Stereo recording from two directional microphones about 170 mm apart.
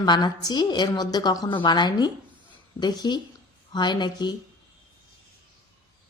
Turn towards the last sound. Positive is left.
turn(degrees=25)  # may be behind; listen again after turning